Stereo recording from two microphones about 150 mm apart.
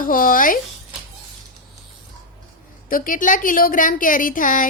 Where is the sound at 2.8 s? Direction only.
70° left (ahead or behind).